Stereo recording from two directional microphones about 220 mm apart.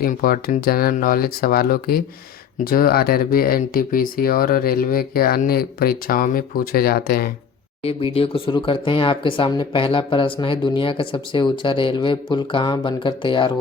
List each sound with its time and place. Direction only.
0.0 s speech: 40° left (ahead or behind)
7.8 s speech: 25° left (ahead or behind)